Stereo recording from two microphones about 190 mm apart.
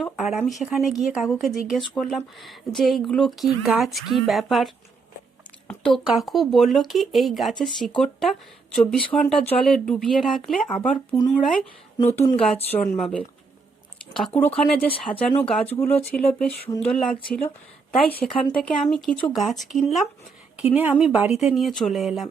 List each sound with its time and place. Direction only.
0.0 s speech: centre (ahead or behind)
12.1 s speech: 15° left (ahead or behind)
12.4 s speech: 5° left (ahead or behind)